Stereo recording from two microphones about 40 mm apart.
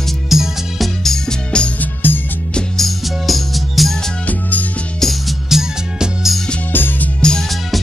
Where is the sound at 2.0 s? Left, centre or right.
Left.